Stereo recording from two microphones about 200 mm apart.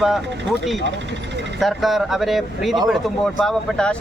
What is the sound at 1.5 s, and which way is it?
A man's voice, centre (ahead or behind).